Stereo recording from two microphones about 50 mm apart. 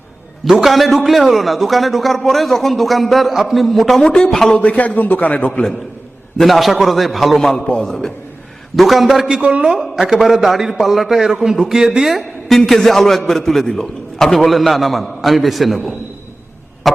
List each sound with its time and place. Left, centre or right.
0.4 s a man's voice: centre
4.0 s speech: centre
4.4 s a man's voice: left
6.3 s a man's voice: centre
9.2 s speech: centre
9.6 s a man's voice: centre
12.5 s a man's voice: centre
16.9 s a sound: centre